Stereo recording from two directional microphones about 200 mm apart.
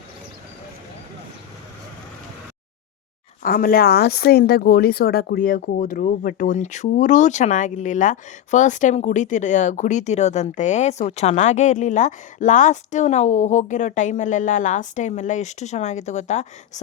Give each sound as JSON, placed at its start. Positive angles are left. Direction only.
{"t": 3.4, "sound": "a woman's voice", "side_deg": 45}